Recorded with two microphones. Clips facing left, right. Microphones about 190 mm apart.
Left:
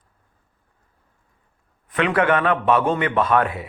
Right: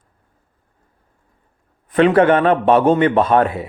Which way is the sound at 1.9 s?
35° right (ahead or behind).